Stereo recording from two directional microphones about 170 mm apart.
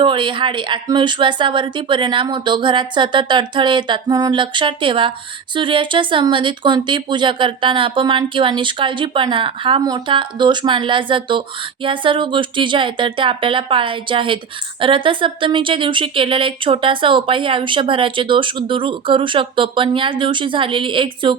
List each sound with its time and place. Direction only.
0.0 s speech: 30° right (ahead or behind)